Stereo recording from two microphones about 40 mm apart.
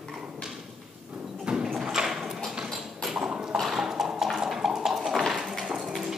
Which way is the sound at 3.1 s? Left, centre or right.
Right.